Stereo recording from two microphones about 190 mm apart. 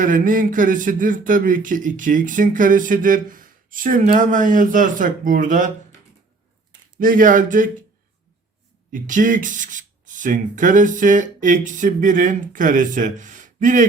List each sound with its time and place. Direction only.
0.0 s a man's voice: 45° right (ahead or behind)
7.0 s a man's voice: 45° right (ahead or behind)
8.9 s a man's voice: 45° right (ahead or behind)